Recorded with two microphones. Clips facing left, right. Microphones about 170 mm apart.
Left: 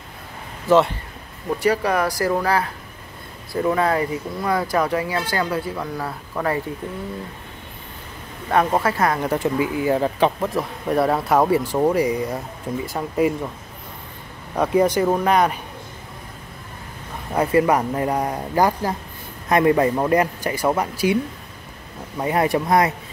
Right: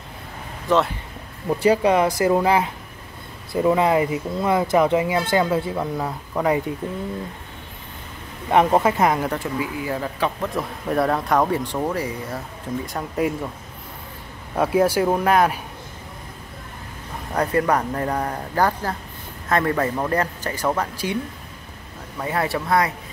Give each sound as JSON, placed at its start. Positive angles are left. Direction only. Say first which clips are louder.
{"t": 0.7, "sound": "speech", "louder": "left 4 dB", "side_deg": 5}
{"t": 1.6, "sound": "speech", "louder": "right 3 dB", "side_deg": -25}
{"t": 8.5, "sound": "speech", "louder": "right 2 dB", "side_deg": -15}
{"t": 9.4, "sound": "speech", "louder": "left 5 dB", "side_deg": 25}
{"t": 10.4, "sound": "speech", "louder": "left 2 dB", "side_deg": 0}
{"t": 12.8, "sound": "speech", "louder": "left 4 dB", "side_deg": 0}
{"t": 14.6, "sound": "speech", "louder": "left 1 dB", "side_deg": -5}
{"t": 17.4, "sound": "speech", "louder": "left 3 dB", "side_deg": 5}
{"t": 22.2, "sound": "speech", "louder": "left 4 dB", "side_deg": 20}